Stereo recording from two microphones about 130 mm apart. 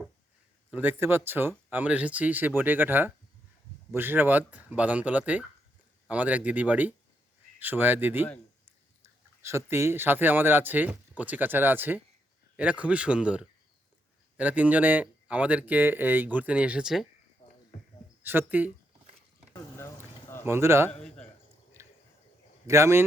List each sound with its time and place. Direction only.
0.7 s speech: 15° right (ahead or behind)
17.4 s a sound: 60° left (ahead or behind)
18.2 s speech: 15° right (ahead or behind)
19.5 s vehicle: 20° left (ahead or behind)
20.4 s speech: 20° right (ahead or behind)
21.8 s drip: 20° right (ahead or behind)
22.6 s speech: 20° right (ahead or behind)